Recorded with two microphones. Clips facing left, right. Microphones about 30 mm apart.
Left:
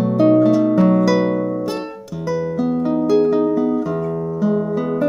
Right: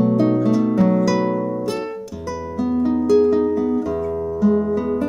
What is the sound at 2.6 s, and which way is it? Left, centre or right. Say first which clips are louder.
Music: right 2 dB; centre.